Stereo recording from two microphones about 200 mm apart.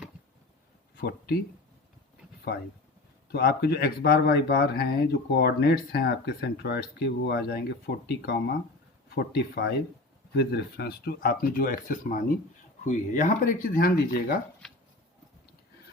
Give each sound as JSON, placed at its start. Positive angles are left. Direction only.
{"t": 3.3, "sound": "speech", "side_deg": 55}